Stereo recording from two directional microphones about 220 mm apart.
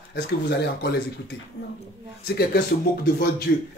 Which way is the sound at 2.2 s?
45° left (ahead or behind).